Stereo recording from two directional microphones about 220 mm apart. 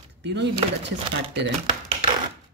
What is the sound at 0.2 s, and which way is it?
Speech, 50° right (ahead or behind).